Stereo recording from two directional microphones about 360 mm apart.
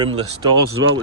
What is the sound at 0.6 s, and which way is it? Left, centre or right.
Speech, right.